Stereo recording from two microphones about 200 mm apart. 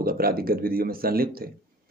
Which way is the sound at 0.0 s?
50° right (ahead or behind).